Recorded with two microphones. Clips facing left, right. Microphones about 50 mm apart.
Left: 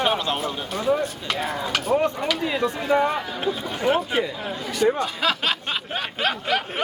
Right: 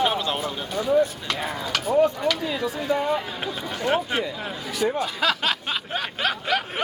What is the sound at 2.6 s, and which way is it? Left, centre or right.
Speech, left.